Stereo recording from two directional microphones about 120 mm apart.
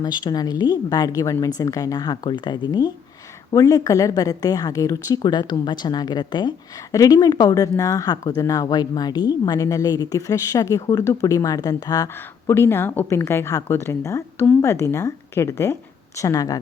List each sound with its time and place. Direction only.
0.0 s speech: 35° left (ahead or behind)
12.0 s speech: 20° left (ahead or behind)